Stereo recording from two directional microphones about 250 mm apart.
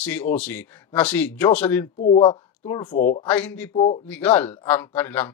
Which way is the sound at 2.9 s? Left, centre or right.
Left.